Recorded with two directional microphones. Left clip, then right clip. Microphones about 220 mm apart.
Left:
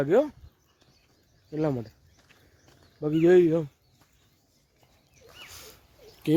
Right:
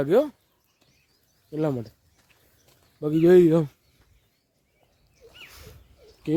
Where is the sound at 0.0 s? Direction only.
20° right (ahead or behind).